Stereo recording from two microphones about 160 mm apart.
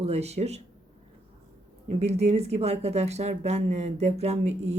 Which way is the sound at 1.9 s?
40° right (ahead or behind).